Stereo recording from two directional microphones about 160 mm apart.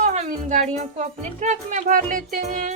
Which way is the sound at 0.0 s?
50° right (ahead or behind).